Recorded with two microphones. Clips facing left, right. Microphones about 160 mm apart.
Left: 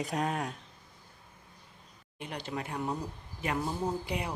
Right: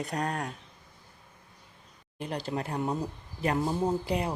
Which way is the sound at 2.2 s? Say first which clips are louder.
Right 5 dB; 35° right (ahead or behind).